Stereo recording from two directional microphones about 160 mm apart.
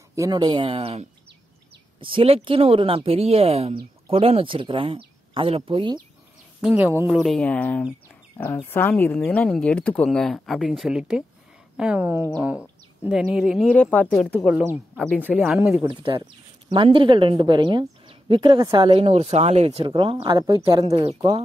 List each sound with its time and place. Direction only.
0.1 s speech: 25° right (ahead or behind)
6.6 s speech: 15° right (ahead or behind)
7.2 s speech: centre (ahead or behind)
13.7 s speech: 10° left (ahead or behind)
15.2 s speech: 5° right (ahead or behind)
15.9 s speech: 35° right (ahead or behind)